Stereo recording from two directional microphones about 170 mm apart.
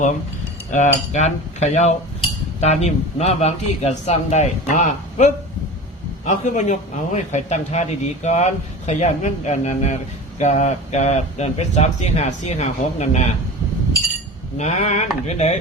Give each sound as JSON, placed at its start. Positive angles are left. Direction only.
{"t": 0.7, "sound": "cutlery", "side_deg": 45}
{"t": 2.6, "sound": "a man's voice", "side_deg": 40}
{"t": 14.6, "sound": "a man's voice", "side_deg": 40}